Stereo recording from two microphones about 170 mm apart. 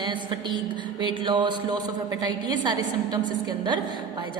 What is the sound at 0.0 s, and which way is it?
Mantra, 25° right (ahead or behind).